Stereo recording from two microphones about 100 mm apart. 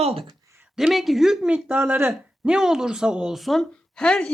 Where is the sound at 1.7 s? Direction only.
20° right (ahead or behind).